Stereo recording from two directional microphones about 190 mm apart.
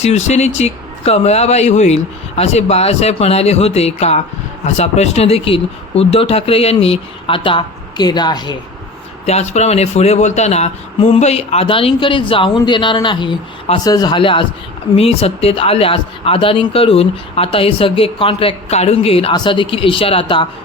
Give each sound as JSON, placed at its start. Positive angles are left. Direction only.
{"t": 0.0, "sound": "speech", "side_deg": 35}
{"t": 9.2, "sound": "speech", "side_deg": 35}